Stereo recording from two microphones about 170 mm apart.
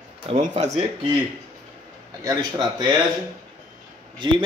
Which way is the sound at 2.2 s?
20° right (ahead or behind).